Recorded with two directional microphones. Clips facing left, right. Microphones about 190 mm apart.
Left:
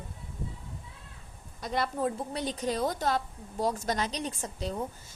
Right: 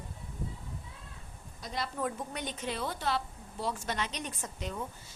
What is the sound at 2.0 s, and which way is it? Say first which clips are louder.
A woman's voice: left 4 dB; 35° left (ahead or behind).